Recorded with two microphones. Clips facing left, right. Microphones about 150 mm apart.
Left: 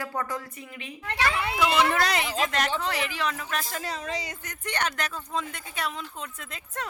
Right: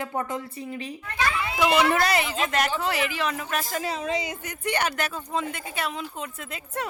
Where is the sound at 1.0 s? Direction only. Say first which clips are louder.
Left 1 dB; 75° left (ahead or behind).